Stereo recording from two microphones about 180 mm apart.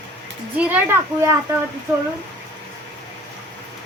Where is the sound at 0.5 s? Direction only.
10° right (ahead or behind).